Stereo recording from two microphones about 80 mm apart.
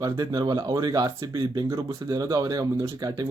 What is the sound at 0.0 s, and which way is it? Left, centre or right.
Speech, right.